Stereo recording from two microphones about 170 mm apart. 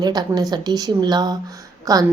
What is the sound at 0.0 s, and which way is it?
Speech, 25° right (ahead or behind).